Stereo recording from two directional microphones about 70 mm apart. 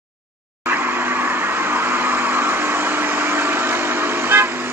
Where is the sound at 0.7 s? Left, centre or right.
Right.